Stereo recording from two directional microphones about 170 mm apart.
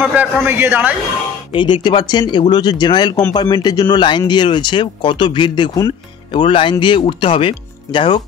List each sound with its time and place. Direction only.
0.1 s a man's voice: 10° right (ahead or behind)
1.5 s speech: 30° left (ahead or behind)